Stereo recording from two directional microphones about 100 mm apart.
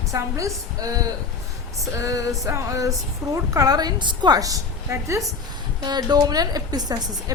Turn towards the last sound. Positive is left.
turn(degrees=-40)  # may be behind; listen again after turning